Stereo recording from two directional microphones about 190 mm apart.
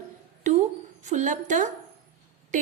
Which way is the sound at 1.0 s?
40° right (ahead or behind).